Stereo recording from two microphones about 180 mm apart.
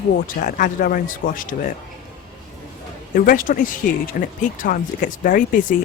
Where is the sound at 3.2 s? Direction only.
50° left (ahead or behind).